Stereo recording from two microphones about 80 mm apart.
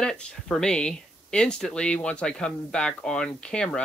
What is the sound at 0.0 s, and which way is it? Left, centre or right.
Speech, centre.